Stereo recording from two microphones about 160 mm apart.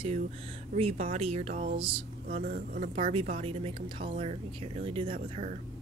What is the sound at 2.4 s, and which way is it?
Speech, 60° right (ahead or behind).